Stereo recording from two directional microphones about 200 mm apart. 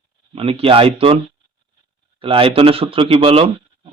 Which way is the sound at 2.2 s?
25° right (ahead or behind).